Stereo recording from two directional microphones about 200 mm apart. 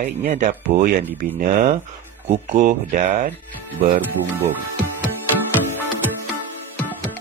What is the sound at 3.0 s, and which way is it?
Speech, 35° right (ahead or behind).